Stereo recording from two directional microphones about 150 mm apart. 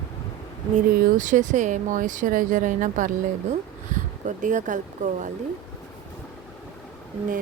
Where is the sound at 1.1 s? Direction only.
55° right (ahead or behind).